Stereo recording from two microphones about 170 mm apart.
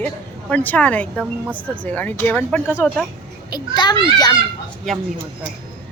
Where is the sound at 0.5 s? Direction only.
10° left (ahead or behind).